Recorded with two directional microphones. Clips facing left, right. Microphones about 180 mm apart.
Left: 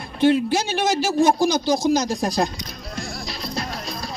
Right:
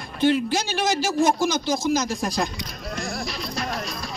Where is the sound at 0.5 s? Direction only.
25° left (ahead or behind).